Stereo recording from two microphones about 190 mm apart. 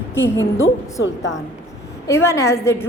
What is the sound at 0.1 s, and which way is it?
Speech, 15° left (ahead or behind).